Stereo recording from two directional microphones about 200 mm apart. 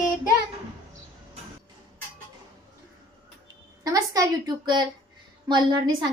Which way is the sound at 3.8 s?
20° right (ahead or behind).